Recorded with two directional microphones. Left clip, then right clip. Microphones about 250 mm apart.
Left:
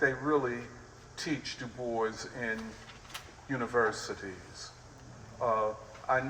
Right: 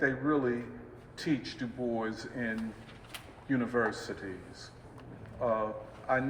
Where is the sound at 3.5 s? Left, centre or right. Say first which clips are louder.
Even; centre.